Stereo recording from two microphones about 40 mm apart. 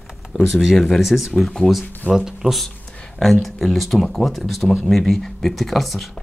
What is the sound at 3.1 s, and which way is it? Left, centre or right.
Speech, centre.